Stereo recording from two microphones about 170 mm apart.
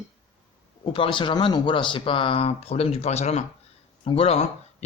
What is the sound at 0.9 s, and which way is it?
A man's voice, 30° left (ahead or behind).